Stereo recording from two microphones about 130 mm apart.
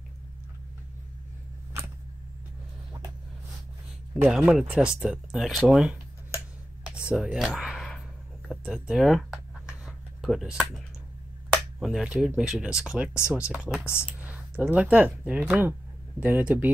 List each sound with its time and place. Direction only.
4.2 s speech: 5° right (ahead or behind)
6.8 s a sound: 5° right (ahead or behind)
11.5 s speech: centre (ahead or behind)